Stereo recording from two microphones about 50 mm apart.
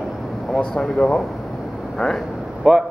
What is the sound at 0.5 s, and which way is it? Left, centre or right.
Speech, centre.